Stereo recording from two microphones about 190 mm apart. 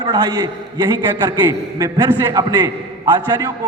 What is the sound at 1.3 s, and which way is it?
A man's voice, 15° right (ahead or behind).